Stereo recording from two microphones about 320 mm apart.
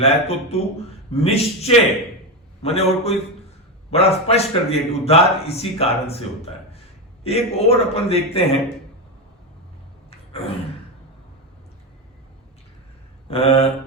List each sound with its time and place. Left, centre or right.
0.0 s a man's voice: centre
10.1 s a sound: centre
13.3 s speech: centre